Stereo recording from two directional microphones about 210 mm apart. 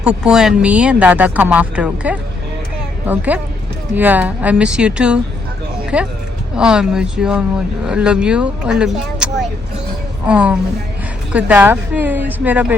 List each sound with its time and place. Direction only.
0.0 s speech: 5° right (ahead or behind)